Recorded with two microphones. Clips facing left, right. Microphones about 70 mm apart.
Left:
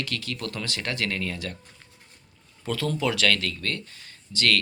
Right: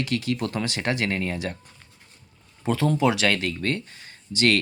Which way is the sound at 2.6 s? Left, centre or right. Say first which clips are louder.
Right 5 dB; right.